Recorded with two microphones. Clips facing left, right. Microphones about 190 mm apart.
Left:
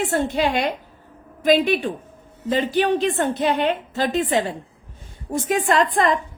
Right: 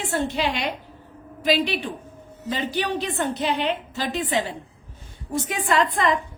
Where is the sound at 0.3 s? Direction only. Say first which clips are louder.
Left 4 dB; 50° left (ahead or behind).